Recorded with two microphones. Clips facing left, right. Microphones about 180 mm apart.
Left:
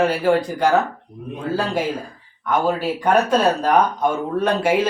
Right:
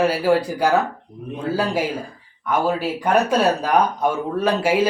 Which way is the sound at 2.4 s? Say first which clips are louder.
Left 1 dB; 10° right (ahead or behind).